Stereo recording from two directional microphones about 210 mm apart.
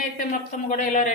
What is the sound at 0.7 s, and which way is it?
Speech, 35° left (ahead or behind).